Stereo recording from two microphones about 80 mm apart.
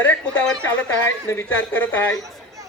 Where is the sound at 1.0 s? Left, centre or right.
Left.